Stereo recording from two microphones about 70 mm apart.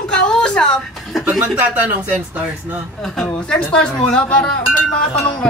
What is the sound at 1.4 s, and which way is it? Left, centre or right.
Speech, right.